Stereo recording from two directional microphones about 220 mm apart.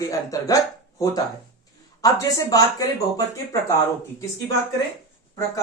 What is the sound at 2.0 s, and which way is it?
Speech, 15° left (ahead or behind).